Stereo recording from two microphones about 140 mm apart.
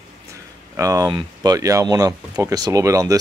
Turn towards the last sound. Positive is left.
turn(degrees=-25)  # may be behind; listen again after turning